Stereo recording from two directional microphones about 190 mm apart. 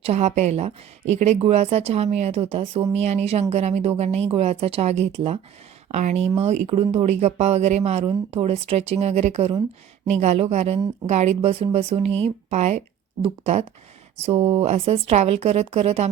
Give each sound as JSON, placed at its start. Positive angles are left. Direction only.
{"t": 0.0, "sound": "speech", "side_deg": -35}